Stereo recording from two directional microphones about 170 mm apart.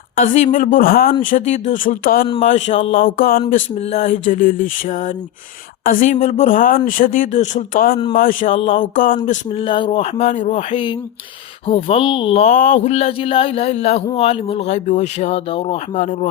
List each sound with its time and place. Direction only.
0.2 s speech: 45° left (ahead or behind)
1.3 s speech: 45° left (ahead or behind)
2.6 s music: 45° left (ahead or behind)
3.5 s speech: 45° left (ahead or behind)
9.6 s speech: 30° left (ahead or behind)